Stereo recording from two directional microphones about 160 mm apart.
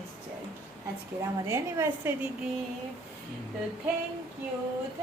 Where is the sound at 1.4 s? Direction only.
15° right (ahead or behind).